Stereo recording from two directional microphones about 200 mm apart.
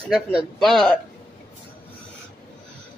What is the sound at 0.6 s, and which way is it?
Speech, 5° left (ahead or behind).